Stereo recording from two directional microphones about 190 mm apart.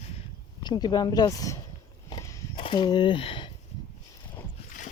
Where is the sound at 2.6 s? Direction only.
25° left (ahead or behind).